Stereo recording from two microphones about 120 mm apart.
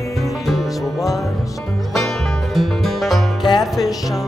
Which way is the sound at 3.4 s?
35° left (ahead or behind).